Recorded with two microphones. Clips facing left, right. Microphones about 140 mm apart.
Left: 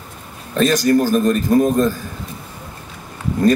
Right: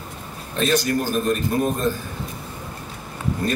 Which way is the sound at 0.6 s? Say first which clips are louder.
Left 6 dB; 40° left (ahead or behind).